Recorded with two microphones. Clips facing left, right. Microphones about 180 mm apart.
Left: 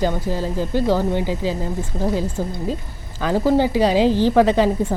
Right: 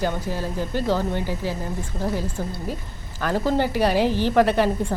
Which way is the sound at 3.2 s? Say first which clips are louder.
Left 5 dB; 15° left (ahead or behind).